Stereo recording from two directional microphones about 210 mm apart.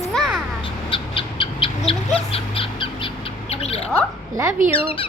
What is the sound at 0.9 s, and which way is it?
Owl, 25° left (ahead or behind).